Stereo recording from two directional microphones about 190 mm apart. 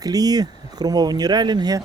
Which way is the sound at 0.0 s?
20° right (ahead or behind).